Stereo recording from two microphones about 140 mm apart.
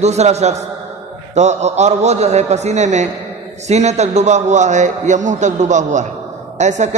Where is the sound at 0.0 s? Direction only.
50° right (ahead or behind).